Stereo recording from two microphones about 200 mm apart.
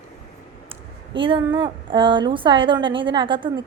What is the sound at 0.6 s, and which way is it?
Speech, 25° right (ahead or behind).